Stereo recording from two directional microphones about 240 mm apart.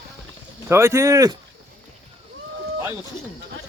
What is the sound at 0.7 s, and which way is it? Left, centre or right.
Speech, centre.